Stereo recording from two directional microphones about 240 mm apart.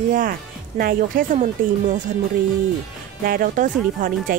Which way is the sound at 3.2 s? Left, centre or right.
Right.